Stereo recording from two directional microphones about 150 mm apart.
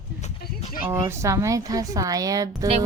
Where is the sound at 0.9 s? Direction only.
20° right (ahead or behind).